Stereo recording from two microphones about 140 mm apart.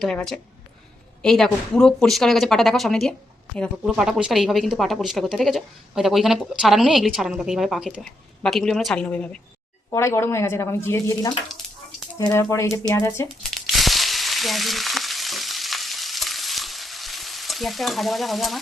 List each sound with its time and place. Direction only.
0.0 s speech: 5° left (ahead or behind)
3.8 s speech: 5° right (ahead or behind)
9.9 s speech: 20° left (ahead or behind)
13.5 s frying: centre (ahead or behind)